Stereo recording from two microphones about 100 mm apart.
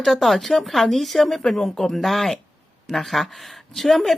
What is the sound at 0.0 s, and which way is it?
Speech, centre (ahead or behind).